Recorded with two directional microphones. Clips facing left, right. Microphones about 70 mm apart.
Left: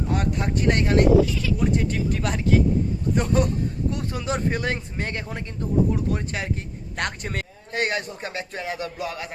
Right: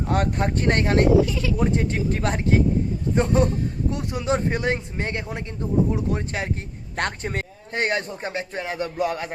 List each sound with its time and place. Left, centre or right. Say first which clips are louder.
0.1 s speech: right 4 dB; right